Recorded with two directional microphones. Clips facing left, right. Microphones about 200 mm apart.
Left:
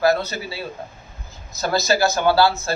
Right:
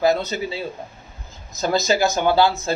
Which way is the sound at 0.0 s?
20° right (ahead or behind).